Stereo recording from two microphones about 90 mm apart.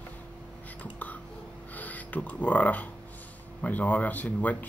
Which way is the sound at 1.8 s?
15° left (ahead or behind).